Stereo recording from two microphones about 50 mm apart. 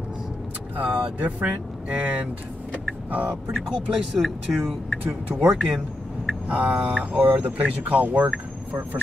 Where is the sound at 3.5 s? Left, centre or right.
Centre.